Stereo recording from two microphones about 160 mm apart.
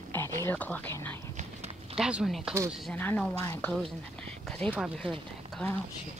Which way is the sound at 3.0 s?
10° left (ahead or behind).